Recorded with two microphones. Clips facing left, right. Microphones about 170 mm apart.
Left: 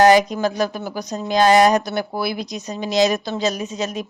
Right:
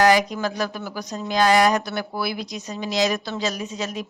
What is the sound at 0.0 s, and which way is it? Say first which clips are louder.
Speech: left 5 dB; 25° left (ahead or behind).